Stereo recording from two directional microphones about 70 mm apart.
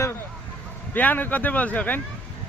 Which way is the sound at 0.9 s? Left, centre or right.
Left.